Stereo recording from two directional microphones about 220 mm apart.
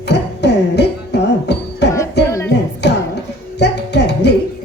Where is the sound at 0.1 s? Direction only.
50° left (ahead or behind).